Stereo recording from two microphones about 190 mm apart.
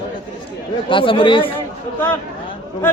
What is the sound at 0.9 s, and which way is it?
Speech, 30° left (ahead or behind).